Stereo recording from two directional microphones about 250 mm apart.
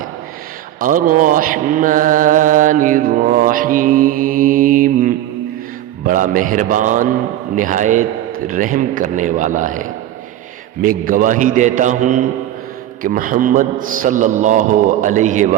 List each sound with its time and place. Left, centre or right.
0.8 s mantra: right